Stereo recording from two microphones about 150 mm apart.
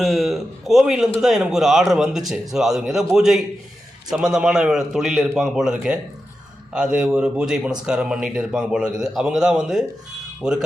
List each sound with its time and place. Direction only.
0.0 s speech: centre (ahead or behind)